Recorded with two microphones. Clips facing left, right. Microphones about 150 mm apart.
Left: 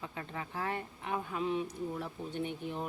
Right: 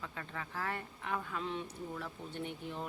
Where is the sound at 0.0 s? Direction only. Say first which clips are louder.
Left 3 dB; 20° left (ahead or behind).